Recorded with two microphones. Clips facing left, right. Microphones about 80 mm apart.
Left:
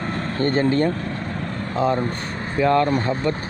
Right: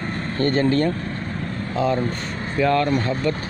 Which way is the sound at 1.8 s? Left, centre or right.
Left.